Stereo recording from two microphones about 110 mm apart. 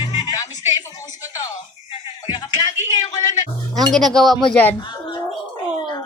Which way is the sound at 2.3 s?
40° left (ahead or behind).